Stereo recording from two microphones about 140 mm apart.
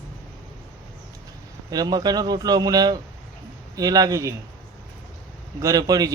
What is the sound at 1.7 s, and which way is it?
A man's voice, 30° right (ahead or behind).